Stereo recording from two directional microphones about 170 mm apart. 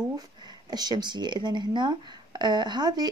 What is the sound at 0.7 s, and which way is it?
Speech, 25° right (ahead or behind).